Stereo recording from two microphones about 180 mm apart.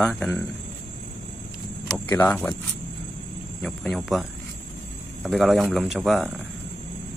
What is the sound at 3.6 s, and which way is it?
Speech, centre (ahead or behind).